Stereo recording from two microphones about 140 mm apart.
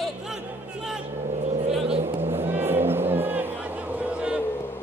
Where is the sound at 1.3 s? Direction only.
55° right (ahead or behind).